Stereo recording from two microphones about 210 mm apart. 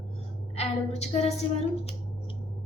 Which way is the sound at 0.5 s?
30° left (ahead or behind).